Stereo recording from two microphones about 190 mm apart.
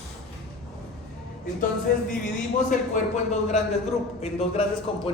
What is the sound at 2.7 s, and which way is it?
Speech, 40° left (ahead or behind).